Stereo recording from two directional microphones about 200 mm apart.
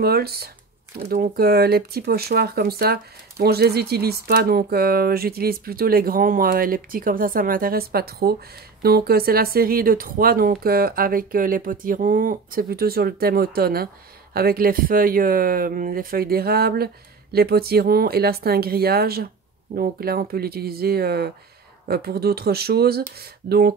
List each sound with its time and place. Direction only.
0.0 s speech: 50° right (ahead or behind)